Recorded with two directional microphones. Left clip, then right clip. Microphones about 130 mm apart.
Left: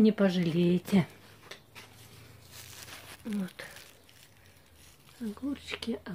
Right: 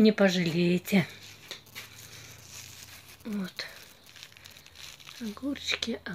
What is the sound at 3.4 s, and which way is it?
Speech, 5° left (ahead or behind).